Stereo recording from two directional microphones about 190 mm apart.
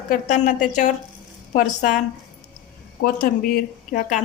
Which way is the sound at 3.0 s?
50° left (ahead or behind).